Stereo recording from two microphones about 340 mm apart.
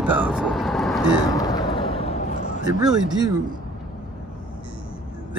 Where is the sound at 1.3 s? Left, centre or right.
Centre.